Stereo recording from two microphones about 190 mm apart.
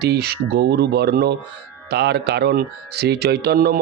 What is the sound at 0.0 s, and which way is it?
A man's voice, 60° right (ahead or behind).